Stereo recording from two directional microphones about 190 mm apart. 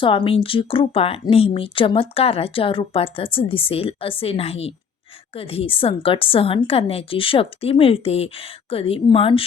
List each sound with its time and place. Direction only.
0.0 s a woman's voice: 25° left (ahead or behind)